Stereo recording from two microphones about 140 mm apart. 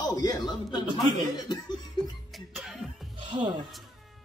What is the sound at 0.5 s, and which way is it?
Speech, 30° left (ahead or behind).